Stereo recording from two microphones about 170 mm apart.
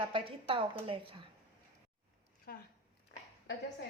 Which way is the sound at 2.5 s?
65° left (ahead or behind).